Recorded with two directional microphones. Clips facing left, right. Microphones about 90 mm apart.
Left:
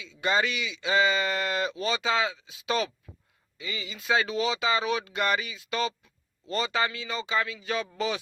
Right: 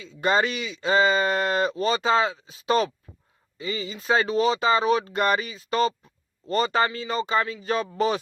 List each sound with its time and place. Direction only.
0.0 s speech: 45° right (ahead or behind)